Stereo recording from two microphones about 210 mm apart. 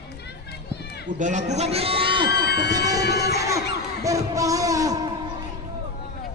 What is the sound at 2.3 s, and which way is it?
Music, 50° left (ahead or behind).